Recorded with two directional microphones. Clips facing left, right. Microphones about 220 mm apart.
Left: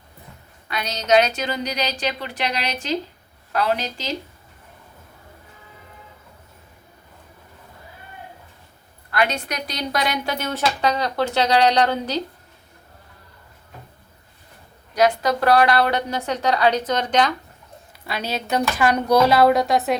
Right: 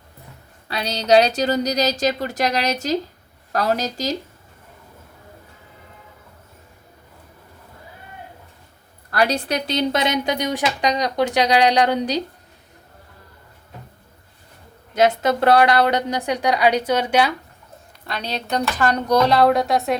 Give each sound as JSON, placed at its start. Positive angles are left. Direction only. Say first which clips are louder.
{"t": 0.7, "sound": "speech", "louder": "right 3 dB", "side_deg": -35}
{"t": 9.0, "sound": "a woman's voice", "louder": "right 3 dB", "side_deg": -35}
{"t": 14.9, "sound": "a woman's voice", "louder": "right 1 dB", "side_deg": -25}
{"t": 18.0, "sound": "speech", "louder": "left 1 dB", "side_deg": 5}